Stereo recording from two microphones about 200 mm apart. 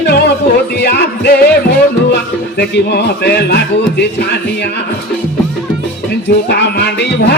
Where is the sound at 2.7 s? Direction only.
55° left (ahead or behind).